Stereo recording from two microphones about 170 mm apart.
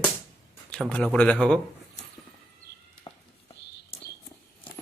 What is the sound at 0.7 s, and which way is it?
Speech, 5° left (ahead or behind).